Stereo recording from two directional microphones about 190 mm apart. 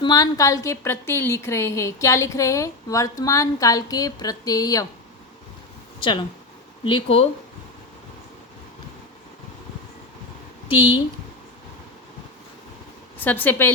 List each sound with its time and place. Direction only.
0.0 s a woman's voice: 20° left (ahead or behind)
6.8 s speech: 25° left (ahead or behind)
10.7 s speech: 25° left (ahead or behind)
13.1 s a woman's voice: 10° left (ahead or behind)